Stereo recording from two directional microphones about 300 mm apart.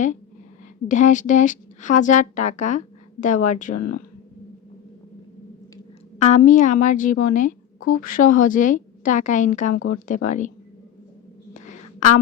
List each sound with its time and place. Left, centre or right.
0.9 s speech: left
6.1 s speech: left
11.5 s a sound: left